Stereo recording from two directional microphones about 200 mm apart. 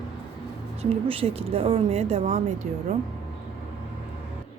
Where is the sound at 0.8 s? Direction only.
30° right (ahead or behind).